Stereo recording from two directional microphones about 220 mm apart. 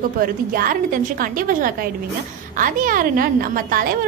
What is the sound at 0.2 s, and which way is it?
A woman's voice, 40° right (ahead or behind).